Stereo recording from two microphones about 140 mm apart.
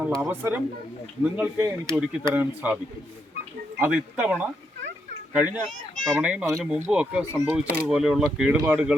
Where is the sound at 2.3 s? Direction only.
10° right (ahead or behind).